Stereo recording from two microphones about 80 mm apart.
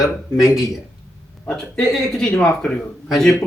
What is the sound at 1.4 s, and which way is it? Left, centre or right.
A man's voice, centre.